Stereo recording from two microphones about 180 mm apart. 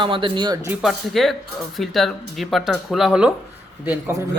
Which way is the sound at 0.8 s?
Centre (ahead or behind).